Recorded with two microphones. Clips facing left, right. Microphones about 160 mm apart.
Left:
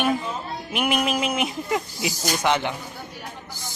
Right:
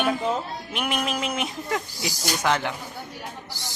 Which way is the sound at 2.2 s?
Centre (ahead or behind).